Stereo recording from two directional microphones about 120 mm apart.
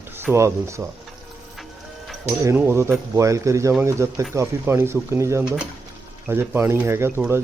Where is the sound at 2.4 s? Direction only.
20° right (ahead or behind).